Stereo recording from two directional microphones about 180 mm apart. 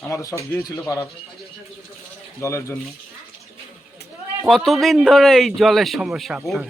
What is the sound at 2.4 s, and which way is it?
Speech, 15° left (ahead or behind).